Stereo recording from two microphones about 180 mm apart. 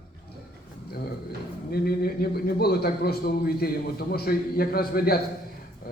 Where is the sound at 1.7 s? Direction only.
55° left (ahead or behind).